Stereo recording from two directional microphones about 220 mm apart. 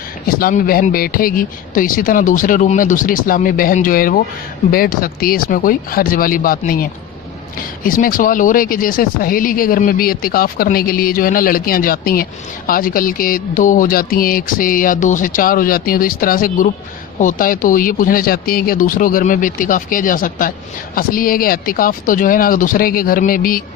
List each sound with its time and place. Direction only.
0.3 s speech: 40° left (ahead or behind)
7.9 s speech: 40° left (ahead or behind)